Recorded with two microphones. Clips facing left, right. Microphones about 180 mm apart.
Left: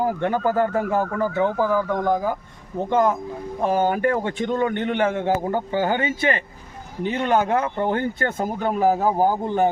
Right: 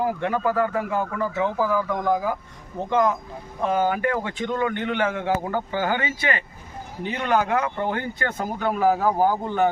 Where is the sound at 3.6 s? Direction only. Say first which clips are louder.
Left 2 dB; 30° left (ahead or behind).